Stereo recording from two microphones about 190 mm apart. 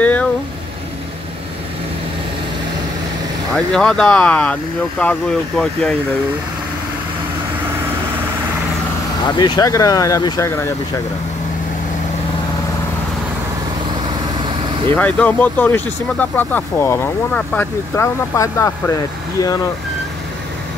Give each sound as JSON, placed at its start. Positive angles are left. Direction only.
{"t": 0.0, "sound": "vehicle", "side_deg": 10}
{"t": 3.5, "sound": "speech", "side_deg": 5}
{"t": 9.4, "sound": "speech", "side_deg": 20}
{"t": 14.9, "sound": "speech", "side_deg": 10}